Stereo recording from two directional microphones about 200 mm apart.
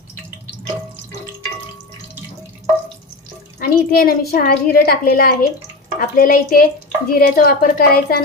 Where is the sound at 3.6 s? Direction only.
50° left (ahead or behind).